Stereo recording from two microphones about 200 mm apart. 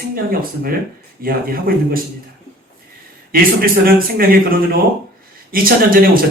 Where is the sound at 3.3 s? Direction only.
45° right (ahead or behind).